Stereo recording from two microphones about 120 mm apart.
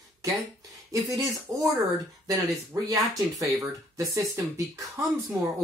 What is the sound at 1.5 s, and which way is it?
Speech, 20° right (ahead or behind).